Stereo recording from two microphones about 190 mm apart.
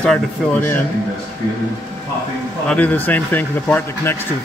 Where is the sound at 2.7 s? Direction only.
10° left (ahead or behind).